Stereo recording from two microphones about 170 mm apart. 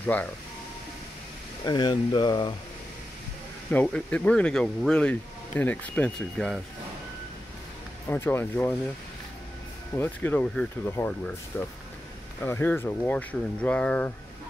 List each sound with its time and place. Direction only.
0.0 s speech: 10° left (ahead or behind)
1.7 s speech: 25° left (ahead or behind)
3.7 s speech: 10° left (ahead or behind)
8.1 s speech: 10° left (ahead or behind)
9.9 s speech: 10° left (ahead or behind)